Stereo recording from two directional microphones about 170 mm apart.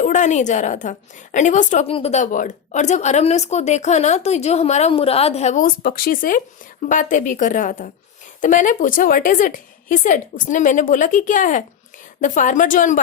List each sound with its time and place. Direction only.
0.0 s a woman's voice: 45° left (ahead or behind)
1.9 s a woman's voice: 35° left (ahead or behind)